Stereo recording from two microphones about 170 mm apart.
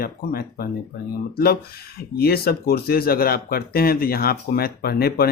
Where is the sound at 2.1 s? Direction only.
65° left (ahead or behind).